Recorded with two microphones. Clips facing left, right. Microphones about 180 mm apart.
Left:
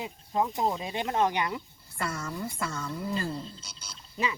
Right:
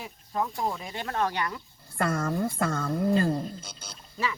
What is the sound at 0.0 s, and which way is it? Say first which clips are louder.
Speech: left 2 dB; 20° left (ahead or behind).